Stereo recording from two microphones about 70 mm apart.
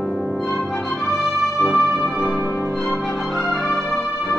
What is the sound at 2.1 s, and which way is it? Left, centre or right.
Music, right.